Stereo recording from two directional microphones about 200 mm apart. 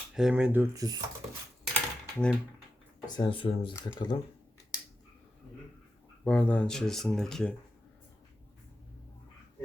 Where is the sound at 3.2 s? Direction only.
25° left (ahead or behind).